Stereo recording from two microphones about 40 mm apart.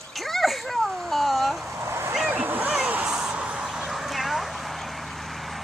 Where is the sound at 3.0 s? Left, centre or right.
Centre.